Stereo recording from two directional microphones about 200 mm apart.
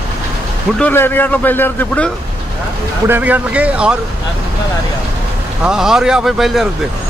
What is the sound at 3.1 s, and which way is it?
Speech, 10° right (ahead or behind).